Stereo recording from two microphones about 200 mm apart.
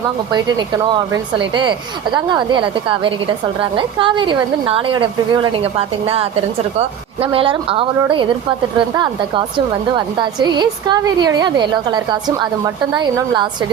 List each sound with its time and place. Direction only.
0.3 s a woman's voice: 20° right (ahead or behind)
9.9 s a woman's voice: 20° right (ahead or behind)